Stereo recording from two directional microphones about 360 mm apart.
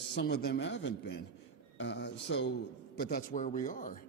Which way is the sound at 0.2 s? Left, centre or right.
Left.